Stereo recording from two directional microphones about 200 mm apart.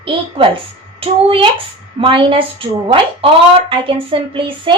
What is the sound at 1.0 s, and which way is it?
Speech, 25° right (ahead or behind).